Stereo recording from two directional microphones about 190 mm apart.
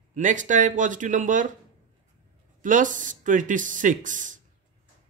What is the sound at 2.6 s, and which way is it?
Speech, 45° right (ahead or behind).